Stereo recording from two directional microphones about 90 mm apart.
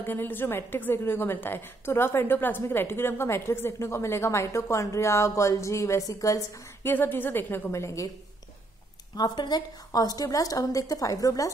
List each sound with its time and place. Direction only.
0.0 s a woman's voice: 25° left (ahead or behind); by 6.4 s 40° left (ahead or behind)
6.8 s a woman's voice: 25° left (ahead or behind)
7.7 s a woman's voice: 35° left (ahead or behind)
9.1 s a woman's voice: 50° left (ahead or behind)